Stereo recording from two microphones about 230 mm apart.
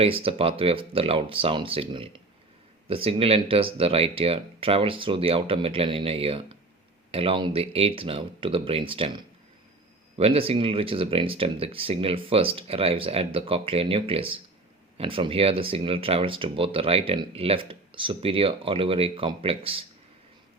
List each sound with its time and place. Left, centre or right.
0.0 s speech: right